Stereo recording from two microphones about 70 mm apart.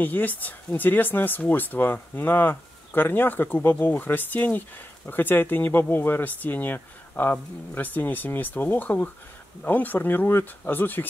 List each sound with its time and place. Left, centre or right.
0.0 s speech: left